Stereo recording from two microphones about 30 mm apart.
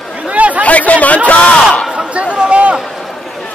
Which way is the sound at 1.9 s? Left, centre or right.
Right.